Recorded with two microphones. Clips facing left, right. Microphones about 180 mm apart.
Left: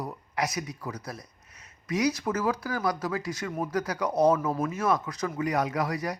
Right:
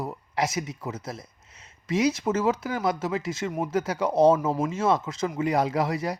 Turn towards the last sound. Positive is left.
turn(degrees=-25)  # may be behind; listen again after turning